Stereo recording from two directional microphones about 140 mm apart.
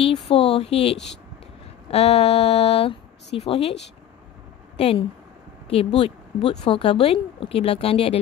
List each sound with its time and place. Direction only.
0.0 s a woman's voice: 45° left (ahead or behind)
4.7 s a woman's voice: 45° left (ahead or behind)